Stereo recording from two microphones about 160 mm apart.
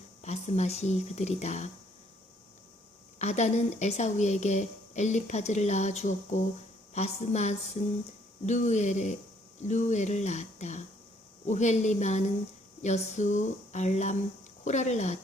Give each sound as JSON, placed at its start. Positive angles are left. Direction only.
{"t": 0.2, "sound": "speech", "side_deg": 45}
{"t": 3.2, "sound": "speech", "side_deg": 45}